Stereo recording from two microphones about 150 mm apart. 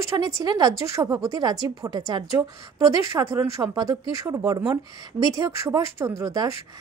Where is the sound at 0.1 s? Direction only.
25° right (ahead or behind).